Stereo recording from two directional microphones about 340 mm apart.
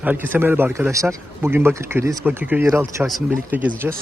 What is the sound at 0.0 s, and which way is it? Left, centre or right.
Speech, centre.